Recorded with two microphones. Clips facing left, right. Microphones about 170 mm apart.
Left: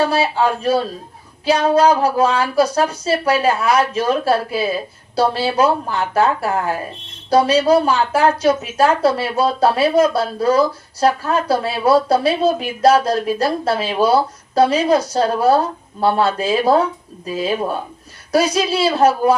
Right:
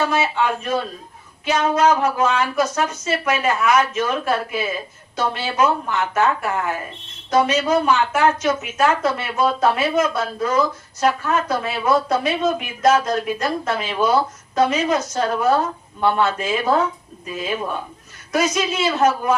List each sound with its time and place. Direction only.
0.0 s speech: 35° left (ahead or behind)